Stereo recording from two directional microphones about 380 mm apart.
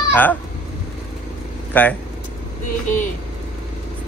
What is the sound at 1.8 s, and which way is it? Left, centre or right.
Speech, centre.